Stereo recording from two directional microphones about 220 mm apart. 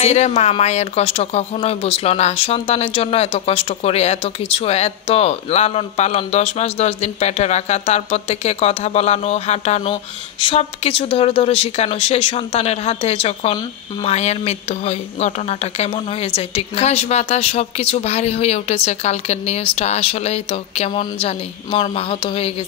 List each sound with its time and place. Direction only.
0.0 s speech: 30° left (ahead or behind)